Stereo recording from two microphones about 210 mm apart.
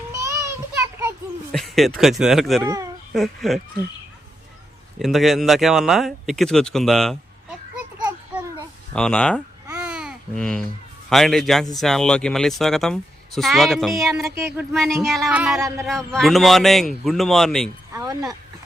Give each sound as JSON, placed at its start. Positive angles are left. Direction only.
{"t": 0.1, "sound": "a sound", "side_deg": -15}
{"t": 1.5, "sound": "speech", "side_deg": 0}
{"t": 2.6, "sound": "speech", "side_deg": -15}
{"t": 3.1, "sound": "speech", "side_deg": 0}
{"t": 4.9, "sound": "speech", "side_deg": 0}
{"t": 7.9, "sound": "a sound", "side_deg": -15}
{"t": 8.9, "sound": "speech", "side_deg": 5}
{"t": 9.7, "sound": "babbling", "side_deg": -5}
{"t": 11.1, "sound": "speech", "side_deg": 0}
{"t": 17.9, "sound": "speech", "side_deg": -15}